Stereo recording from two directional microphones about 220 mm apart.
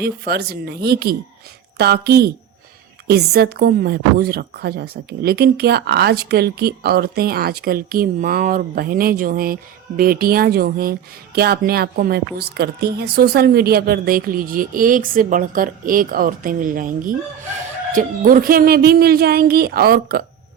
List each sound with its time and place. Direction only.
0.0 s a woman's voice: 45° right (ahead or behind)